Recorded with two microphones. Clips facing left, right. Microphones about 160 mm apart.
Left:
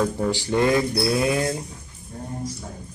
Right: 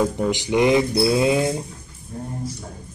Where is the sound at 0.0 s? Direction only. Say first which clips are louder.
Right 2 dB; 15° right (ahead or behind).